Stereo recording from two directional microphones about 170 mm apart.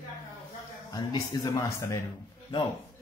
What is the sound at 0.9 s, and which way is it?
Speech, 20° left (ahead or behind).